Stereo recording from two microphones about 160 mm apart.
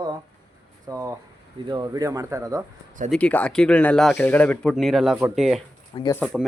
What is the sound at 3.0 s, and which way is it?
Speech, 5° left (ahead or behind).